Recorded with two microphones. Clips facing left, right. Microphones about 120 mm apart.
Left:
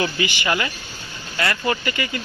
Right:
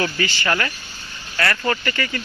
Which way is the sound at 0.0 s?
15° left (ahead or behind).